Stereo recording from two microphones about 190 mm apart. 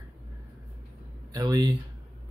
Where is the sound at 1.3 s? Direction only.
20° right (ahead or behind).